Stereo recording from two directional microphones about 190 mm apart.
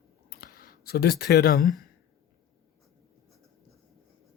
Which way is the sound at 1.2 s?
60° left (ahead or behind).